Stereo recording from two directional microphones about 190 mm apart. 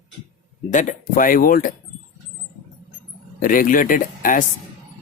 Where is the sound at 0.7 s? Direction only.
40° left (ahead or behind).